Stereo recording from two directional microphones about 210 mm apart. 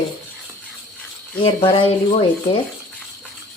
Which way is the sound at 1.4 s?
25° left (ahead or behind).